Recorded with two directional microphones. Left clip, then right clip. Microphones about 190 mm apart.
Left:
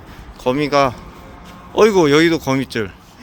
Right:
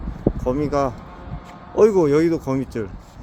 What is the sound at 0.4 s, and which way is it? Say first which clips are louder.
Speech: left 8 dB; centre (ahead or behind).